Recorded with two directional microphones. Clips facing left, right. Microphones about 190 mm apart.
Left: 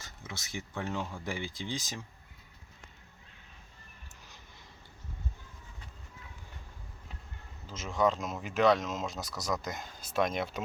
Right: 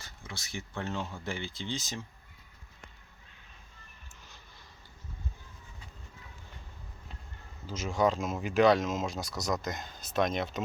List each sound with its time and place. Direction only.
0.0 s a sound: 20° left (ahead or behind)
0.8 s speech: 10° left (ahead or behind)
7.7 s speech: centre (ahead or behind)